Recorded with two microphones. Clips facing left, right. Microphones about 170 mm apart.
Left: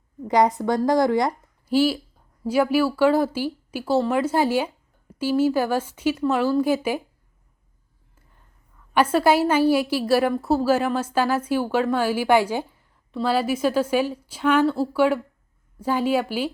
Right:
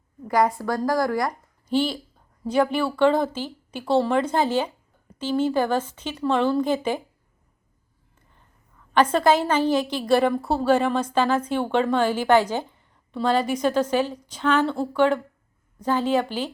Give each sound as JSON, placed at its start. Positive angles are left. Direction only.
{"t": 0.3, "sound": "a woman's voice", "side_deg": 20}
{"t": 1.3, "sound": "a sound", "side_deg": 5}
{"t": 2.5, "sound": "speech", "side_deg": 10}
{"t": 8.9, "sound": "speech", "side_deg": 10}